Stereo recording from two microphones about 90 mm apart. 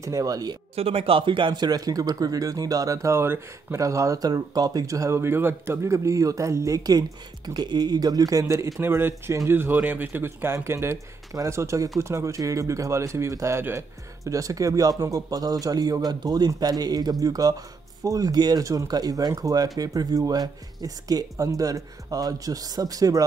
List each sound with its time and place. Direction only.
0.0 s speech: 40° right (ahead or behind)
0.7 s speech: 90° right; by 23.2 s 40° right (ahead or behind)